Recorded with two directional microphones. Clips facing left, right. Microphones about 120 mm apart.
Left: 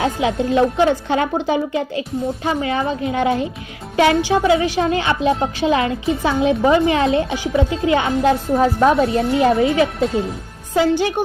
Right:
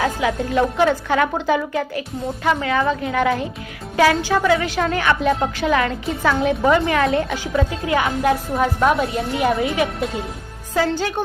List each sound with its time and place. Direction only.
0.0 s a woman's voice: 25° left (ahead or behind)
10.8 s a woman's voice: 15° left (ahead or behind)